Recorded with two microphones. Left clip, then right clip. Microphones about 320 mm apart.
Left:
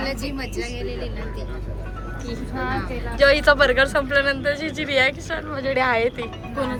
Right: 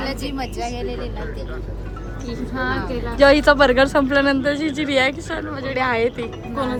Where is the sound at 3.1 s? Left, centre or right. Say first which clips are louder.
Right 2 dB; centre.